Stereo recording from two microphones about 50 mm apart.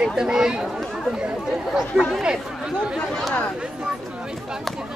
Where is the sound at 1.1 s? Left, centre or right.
Centre.